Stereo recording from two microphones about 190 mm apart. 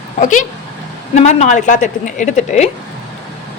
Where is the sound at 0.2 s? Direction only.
45° left (ahead or behind).